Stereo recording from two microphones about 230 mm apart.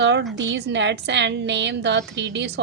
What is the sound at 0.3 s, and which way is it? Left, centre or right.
A woman's voice, right.